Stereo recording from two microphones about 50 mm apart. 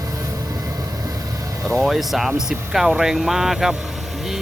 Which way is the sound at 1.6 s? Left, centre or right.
Centre.